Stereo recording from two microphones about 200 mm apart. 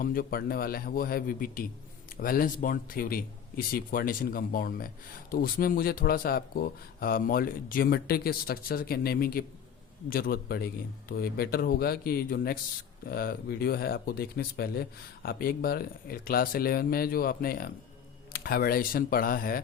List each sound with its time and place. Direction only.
0.0 s speech: 45° left (ahead or behind)